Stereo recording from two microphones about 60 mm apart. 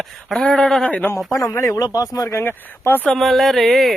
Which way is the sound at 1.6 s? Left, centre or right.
Left.